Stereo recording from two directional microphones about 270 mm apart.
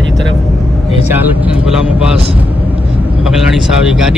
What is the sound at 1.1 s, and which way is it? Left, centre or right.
Speech, centre.